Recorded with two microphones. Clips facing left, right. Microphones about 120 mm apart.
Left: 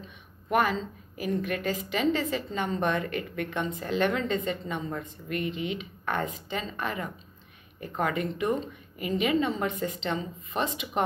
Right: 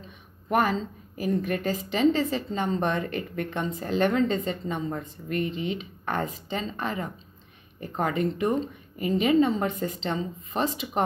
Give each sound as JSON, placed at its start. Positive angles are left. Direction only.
{"t": 0.5, "sound": "a woman's voice", "side_deg": -35}